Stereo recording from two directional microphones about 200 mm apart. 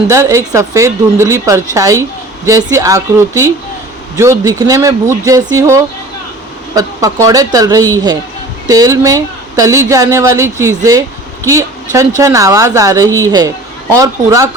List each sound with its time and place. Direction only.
0.1 s speech: 15° right (ahead or behind)